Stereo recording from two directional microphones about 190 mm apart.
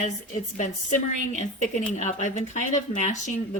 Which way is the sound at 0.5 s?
40° left (ahead or behind).